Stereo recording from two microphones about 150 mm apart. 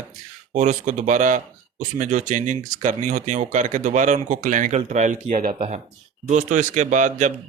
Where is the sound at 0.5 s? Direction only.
55° right (ahead or behind).